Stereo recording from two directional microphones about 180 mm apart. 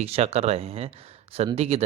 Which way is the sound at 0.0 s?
35° right (ahead or behind).